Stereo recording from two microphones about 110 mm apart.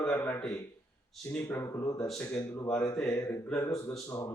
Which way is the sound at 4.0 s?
30° left (ahead or behind).